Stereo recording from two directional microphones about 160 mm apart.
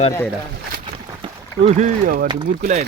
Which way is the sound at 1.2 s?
40° right (ahead or behind).